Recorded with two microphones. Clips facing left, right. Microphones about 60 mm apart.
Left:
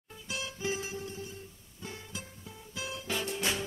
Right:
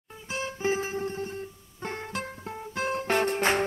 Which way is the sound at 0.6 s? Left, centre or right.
Right.